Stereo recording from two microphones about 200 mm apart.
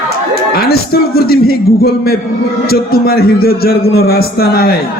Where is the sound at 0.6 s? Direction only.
50° left (ahead or behind).